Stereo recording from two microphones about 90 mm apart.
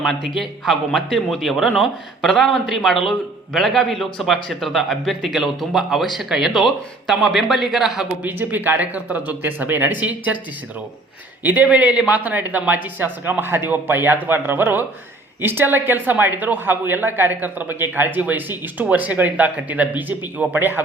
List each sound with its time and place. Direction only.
0.0 s a man's voice: centre (ahead or behind)
8.2 s speech: 20° right (ahead or behind)
11.4 s speech: 15° right (ahead or behind)